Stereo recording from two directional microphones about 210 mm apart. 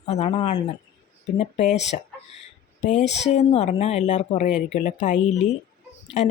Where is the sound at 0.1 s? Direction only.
30° left (ahead or behind).